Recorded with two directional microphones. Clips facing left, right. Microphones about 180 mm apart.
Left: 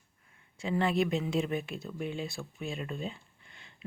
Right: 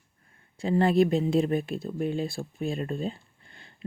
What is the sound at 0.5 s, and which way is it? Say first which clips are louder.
Speech: right 7 dB; 35° right (ahead or behind).